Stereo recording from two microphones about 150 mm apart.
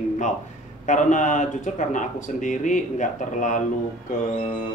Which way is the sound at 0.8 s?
55° left (ahead or behind).